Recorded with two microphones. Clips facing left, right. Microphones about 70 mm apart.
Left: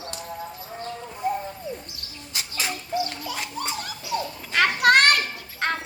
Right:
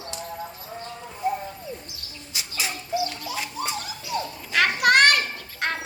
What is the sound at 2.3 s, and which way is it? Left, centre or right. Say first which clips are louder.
Bird: left 1 dB; left.